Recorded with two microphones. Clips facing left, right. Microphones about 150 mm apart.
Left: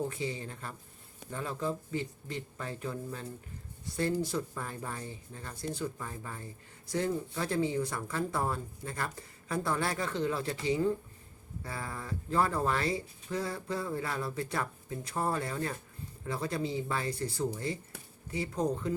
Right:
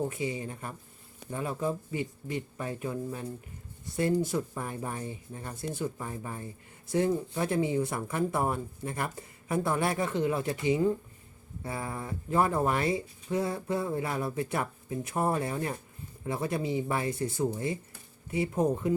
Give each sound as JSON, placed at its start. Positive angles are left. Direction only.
{"t": 0.1, "sound": "speech", "side_deg": -15}